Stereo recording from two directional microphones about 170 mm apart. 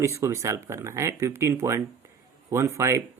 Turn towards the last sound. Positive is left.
turn(degrees=-15)  # may be behind; listen again after turning